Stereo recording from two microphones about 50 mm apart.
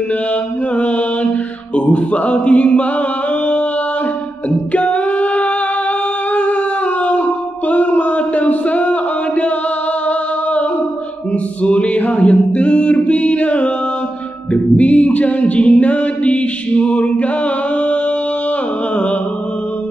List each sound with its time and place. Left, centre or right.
0.7 s mantra: left
1.8 s a sound: left
4.5 s singing: left
10.0 s a sound: left
11.6 s singing: left
14.5 s a capella: left